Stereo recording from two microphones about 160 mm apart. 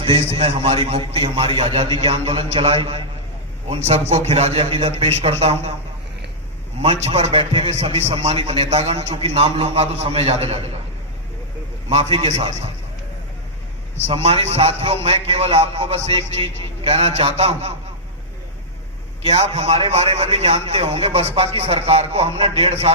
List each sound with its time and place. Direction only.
0.0 s a man's voice: 35° right (ahead or behind)
6.8 s a man's voice: 40° right (ahead or behind)
11.9 s a man's voice: 40° right (ahead or behind)
14.1 s a man's voice: 35° right (ahead or behind)
19.2 s a man's voice: 40° right (ahead or behind)